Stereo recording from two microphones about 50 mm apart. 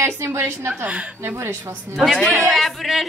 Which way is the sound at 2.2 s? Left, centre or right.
Centre.